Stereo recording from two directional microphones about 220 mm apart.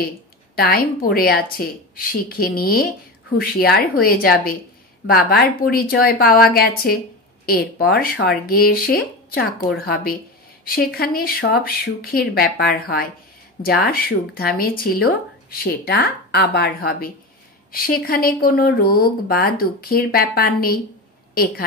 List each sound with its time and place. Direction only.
0.6 s a woman's voice: 45° left (ahead or behind)